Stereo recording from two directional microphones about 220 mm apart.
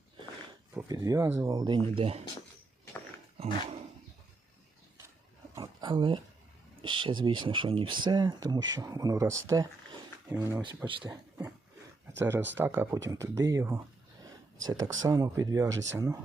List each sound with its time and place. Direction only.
0.7 s speech: 10° right (ahead or behind); by 2.2 s 25° right (ahead or behind)
5.5 s a sound: 20° right (ahead or behind)
6.8 s speech: 20° right (ahead or behind)
12.1 s speech: 10° right (ahead or behind)